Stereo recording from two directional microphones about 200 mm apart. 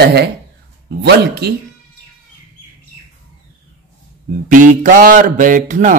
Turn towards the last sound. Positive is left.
turn(degrees=-40)  # may be behind; listen again after turning